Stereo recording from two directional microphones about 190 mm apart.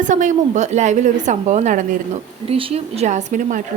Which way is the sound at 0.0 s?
40° right (ahead or behind).